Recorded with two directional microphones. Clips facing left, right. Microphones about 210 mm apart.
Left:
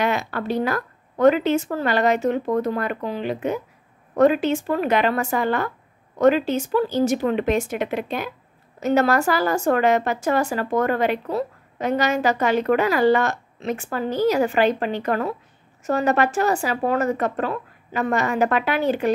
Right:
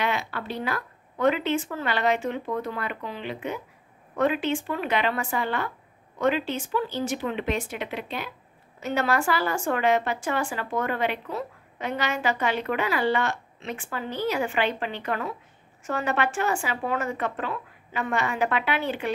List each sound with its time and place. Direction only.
0.0 s a woman's voice: 45° left (ahead or behind)